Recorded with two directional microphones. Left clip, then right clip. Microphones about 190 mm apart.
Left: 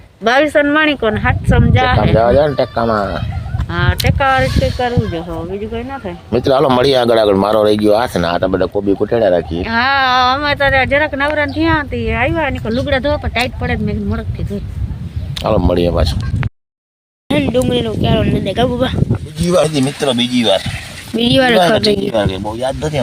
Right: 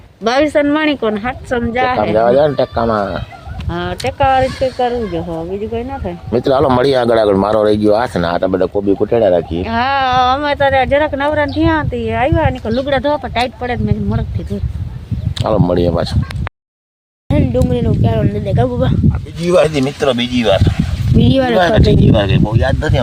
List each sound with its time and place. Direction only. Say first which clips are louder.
0.3 s speech: left 1 dB; 15° right (ahead or behind)
2.1 s speech: right 1 dB; 15° left (ahead or behind)
3.7 s speech: left 2 dB; centre (ahead or behind)
4.4 s speech: right 1 dB; 15° left (ahead or behind)
5.1 s speech: right 2 dB; centre (ahead or behind)
6.3 s speech: even; 10° left (ahead or behind)
9.6 s speech: left 3 dB; centre (ahead or behind)
15.4 s speech: even; 10° left (ahead or behind)
17.2 s speech: left 1 dB; 5° left (ahead or behind)
22.1 s speech: right 2 dB; 35° left (ahead or behind)